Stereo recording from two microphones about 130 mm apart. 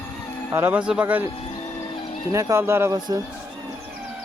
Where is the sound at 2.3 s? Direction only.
20° right (ahead or behind).